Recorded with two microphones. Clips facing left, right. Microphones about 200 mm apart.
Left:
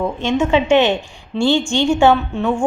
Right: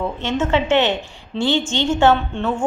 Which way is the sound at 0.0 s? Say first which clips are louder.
Left 4 dB; 15° left (ahead or behind).